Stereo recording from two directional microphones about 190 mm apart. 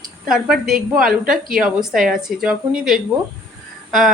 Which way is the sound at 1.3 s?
45° right (ahead or behind).